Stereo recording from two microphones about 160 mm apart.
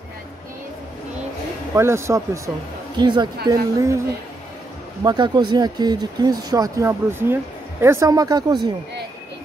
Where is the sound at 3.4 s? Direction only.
20° right (ahead or behind).